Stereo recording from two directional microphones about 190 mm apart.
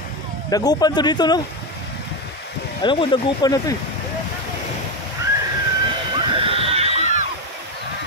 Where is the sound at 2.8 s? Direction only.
25° left (ahead or behind).